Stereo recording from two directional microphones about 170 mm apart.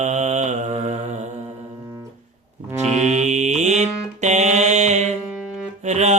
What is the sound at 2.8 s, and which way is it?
Mantra, 45° right (ahead or behind).